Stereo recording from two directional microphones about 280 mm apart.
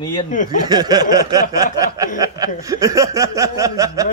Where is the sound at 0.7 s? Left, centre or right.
Centre.